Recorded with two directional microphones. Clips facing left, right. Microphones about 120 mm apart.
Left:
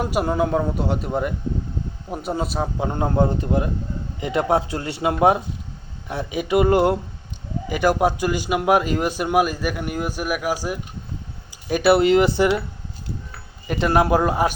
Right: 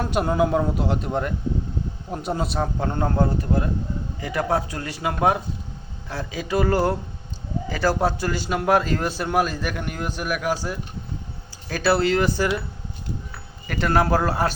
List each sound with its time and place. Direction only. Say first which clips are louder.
0.0 s a man's voice: even; 5° left (ahead or behind); by 12.6 s 20° left (ahead or behind)
13.7 s speech: left 2 dB; 20° left (ahead or behind)